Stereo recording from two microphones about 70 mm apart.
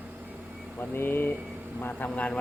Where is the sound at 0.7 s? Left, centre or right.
Left.